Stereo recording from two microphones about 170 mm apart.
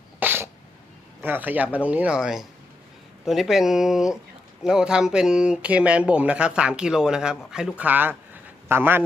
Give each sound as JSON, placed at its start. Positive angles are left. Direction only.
{"t": 0.2, "sound": "sneeze", "side_deg": -10}
{"t": 1.2, "sound": "speech", "side_deg": -10}